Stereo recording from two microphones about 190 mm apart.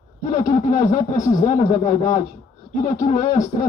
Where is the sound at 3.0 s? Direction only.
40° left (ahead or behind).